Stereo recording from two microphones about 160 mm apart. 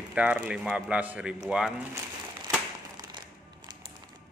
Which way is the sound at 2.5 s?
20° right (ahead or behind).